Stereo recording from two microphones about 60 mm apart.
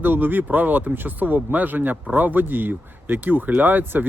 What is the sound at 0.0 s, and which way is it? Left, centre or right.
Speech, right.